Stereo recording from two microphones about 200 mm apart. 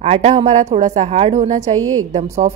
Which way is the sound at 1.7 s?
90° right.